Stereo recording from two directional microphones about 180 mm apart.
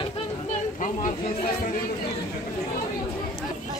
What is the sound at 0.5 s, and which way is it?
Speech, 40° left (ahead or behind).